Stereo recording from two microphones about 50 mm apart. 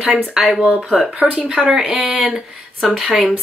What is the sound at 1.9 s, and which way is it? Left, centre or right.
Speech, right.